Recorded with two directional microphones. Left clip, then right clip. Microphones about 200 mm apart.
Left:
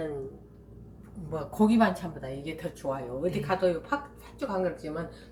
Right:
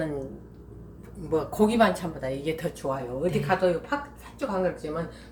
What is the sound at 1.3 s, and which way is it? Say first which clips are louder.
Speech: right 4 dB; 55° right (ahead or behind).